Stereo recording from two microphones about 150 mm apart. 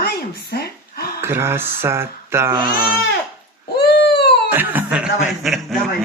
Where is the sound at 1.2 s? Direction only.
15° right (ahead or behind).